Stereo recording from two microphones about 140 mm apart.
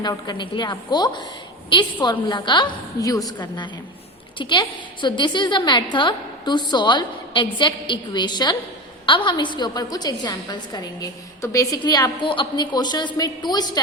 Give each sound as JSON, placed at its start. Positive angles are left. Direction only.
{"t": 0.0, "sound": "a woman's voice", "side_deg": 30}